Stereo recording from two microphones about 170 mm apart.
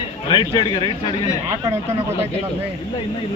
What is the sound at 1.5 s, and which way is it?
Speech, 20° right (ahead or behind).